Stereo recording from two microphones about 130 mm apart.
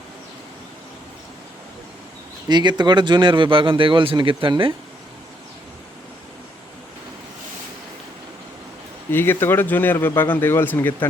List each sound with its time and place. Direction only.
2.5 s speech: 35° right (ahead or behind)
9.0 s speech: 15° left (ahead or behind)